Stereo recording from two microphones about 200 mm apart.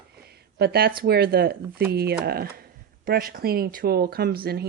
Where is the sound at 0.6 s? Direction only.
50° right (ahead or behind).